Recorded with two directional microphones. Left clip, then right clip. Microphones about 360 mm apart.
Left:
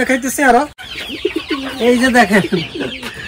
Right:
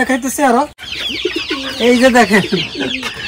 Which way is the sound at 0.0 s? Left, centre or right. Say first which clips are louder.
Even; centre.